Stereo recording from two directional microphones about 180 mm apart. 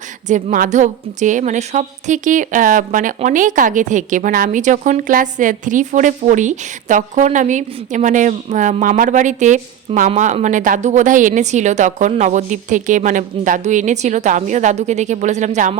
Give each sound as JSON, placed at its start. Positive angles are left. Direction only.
{"t": 0.3, "sound": "a woman's voice", "side_deg": -45}